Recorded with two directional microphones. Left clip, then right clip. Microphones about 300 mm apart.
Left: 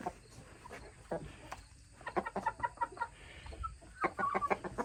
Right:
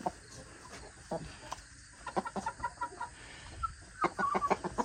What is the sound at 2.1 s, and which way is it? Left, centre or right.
Chicken, centre.